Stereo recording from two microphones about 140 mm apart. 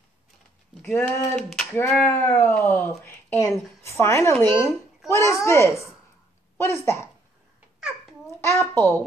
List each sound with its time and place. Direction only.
0.8 s speech: 10° left (ahead or behind)
3.0 s a sound: 15° left (ahead or behind)
3.8 s a child's voice: 20° left (ahead or behind)
8.5 s speech: 15° left (ahead or behind)